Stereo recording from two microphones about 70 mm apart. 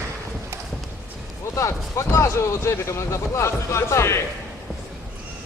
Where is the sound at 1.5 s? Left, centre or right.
Left.